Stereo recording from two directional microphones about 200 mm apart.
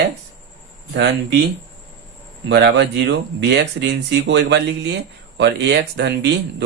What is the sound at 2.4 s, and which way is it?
Speech, 60° right (ahead or behind).